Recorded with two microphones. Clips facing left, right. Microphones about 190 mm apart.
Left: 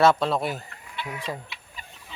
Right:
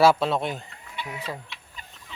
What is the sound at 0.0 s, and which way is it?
Speech, 5° right (ahead or behind).